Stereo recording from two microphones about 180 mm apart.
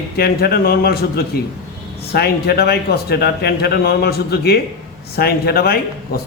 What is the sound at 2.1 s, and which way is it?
A man's voice, 60° left (ahead or behind).